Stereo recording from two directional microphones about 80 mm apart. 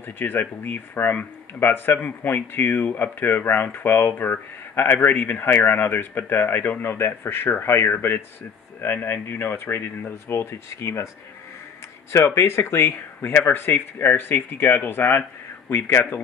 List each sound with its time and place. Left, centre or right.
0.0 s speech: left
12.4 s speech: left